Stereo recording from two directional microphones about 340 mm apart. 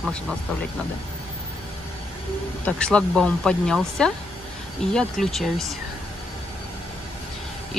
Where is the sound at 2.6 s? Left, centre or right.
Centre.